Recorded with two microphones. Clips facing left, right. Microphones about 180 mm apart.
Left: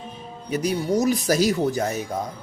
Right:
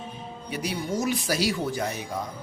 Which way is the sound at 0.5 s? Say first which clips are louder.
Left 7 dB; 45° left (ahead or behind).